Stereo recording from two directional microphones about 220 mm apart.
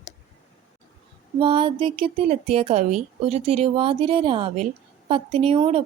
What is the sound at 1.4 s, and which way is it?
Speech, 20° right (ahead or behind).